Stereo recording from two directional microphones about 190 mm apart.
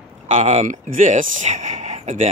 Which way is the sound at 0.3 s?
30° right (ahead or behind).